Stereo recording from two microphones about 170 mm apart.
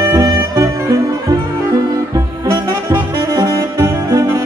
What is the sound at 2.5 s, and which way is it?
Saxophone, 15° right (ahead or behind).